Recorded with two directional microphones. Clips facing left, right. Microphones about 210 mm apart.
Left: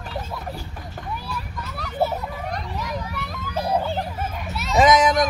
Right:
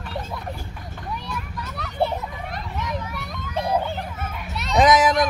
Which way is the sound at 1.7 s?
5° left (ahead or behind).